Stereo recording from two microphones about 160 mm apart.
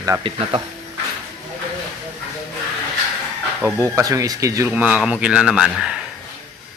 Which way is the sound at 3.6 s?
20° right (ahead or behind).